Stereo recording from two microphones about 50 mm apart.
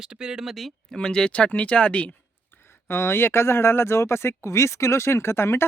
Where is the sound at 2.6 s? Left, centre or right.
Left.